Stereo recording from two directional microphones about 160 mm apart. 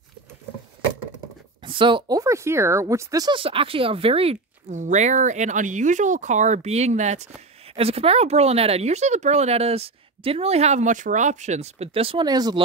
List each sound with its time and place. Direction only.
1.6 s speech: 30° right (ahead or behind)